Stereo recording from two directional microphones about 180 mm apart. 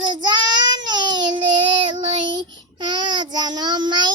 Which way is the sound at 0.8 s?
25° right (ahead or behind).